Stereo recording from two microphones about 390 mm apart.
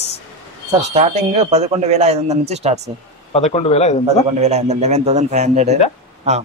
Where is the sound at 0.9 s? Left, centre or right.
Centre.